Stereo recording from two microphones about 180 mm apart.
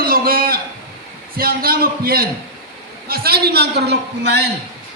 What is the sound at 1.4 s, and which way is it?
A man's voice, 55° right (ahead or behind).